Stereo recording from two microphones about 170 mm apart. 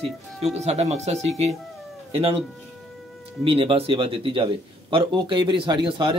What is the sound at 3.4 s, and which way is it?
A man's voice, 30° right (ahead or behind).